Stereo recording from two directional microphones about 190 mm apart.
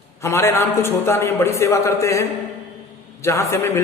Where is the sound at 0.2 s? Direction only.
15° left (ahead or behind).